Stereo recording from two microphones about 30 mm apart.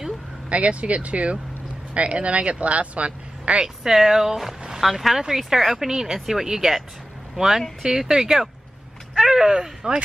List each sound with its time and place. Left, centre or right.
0.5 s speech: right
3.6 s speech: centre